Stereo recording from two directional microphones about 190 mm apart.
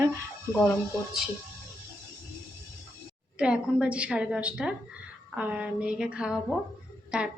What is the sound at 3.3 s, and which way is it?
A woman's voice, 5° right (ahead or behind).